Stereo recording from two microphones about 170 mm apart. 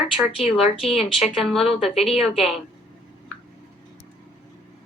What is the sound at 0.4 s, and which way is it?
Speech, 35° left (ahead or behind).